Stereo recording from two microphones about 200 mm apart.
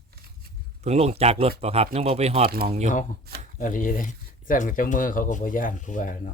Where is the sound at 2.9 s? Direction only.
40° left (ahead or behind).